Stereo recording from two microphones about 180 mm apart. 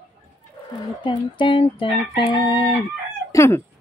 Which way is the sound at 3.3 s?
15° left (ahead or behind).